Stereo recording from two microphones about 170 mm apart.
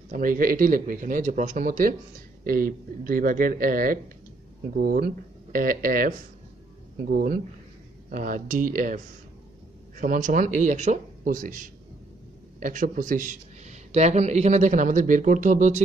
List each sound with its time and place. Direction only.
0.1 s speech: 55° right (ahead or behind)